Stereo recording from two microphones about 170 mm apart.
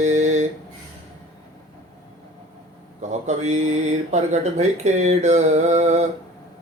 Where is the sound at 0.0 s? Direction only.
45° right (ahead or behind).